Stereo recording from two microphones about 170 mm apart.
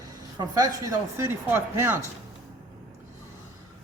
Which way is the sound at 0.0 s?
20° right (ahead or behind).